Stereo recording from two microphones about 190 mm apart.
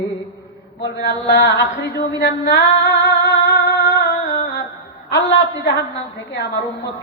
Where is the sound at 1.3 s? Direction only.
65° left (ahead or behind).